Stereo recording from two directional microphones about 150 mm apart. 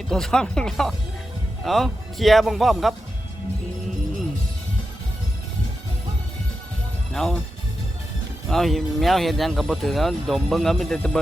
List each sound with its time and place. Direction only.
0.1 s speech: 5° left (ahead or behind)
7.1 s speech: 5° left (ahead or behind)
8.4 s speech: centre (ahead or behind)